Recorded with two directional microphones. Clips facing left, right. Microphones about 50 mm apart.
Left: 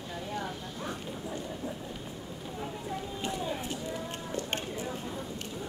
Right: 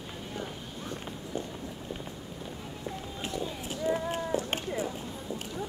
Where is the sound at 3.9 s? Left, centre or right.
Centre.